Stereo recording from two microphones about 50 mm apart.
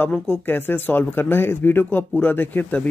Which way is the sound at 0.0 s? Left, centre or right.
Left.